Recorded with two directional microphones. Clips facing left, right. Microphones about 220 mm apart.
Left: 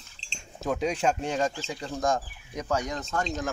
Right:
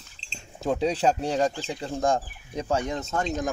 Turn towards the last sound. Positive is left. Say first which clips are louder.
# right 3 dB
turn(degrees=-20)  # may be behind; listen again after turning